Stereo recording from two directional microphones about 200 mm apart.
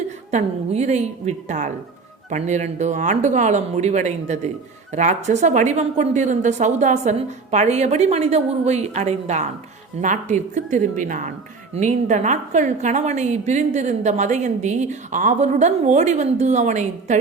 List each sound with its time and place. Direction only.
0.3 s speech: 35° right (ahead or behind)